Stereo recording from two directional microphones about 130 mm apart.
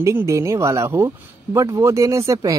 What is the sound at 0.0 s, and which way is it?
Speech, 20° right (ahead or behind).